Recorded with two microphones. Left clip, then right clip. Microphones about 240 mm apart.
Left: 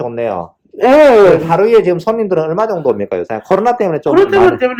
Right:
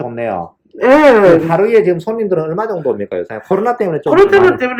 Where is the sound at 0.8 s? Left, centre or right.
Left.